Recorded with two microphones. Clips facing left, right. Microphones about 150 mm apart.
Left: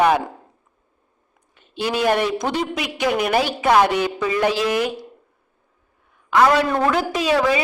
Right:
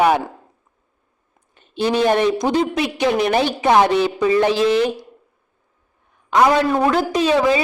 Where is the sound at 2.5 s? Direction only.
30° right (ahead or behind).